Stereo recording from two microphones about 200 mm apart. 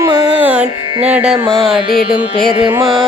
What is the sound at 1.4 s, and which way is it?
Music, 25° right (ahead or behind).